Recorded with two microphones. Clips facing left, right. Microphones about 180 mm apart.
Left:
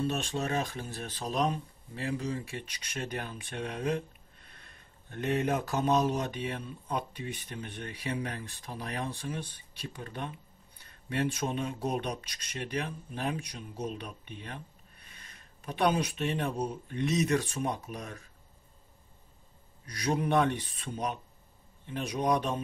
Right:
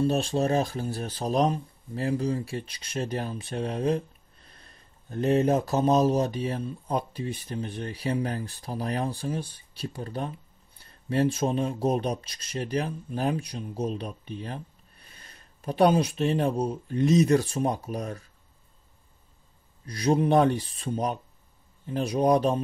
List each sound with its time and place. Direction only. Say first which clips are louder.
0.0 s speech: right 7 dB; 35° right (ahead or behind)
19.9 s speech: right 6 dB; 30° right (ahead or behind)